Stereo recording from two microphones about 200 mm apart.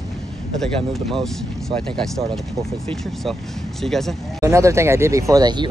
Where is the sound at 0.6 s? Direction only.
Centre (ahead or behind).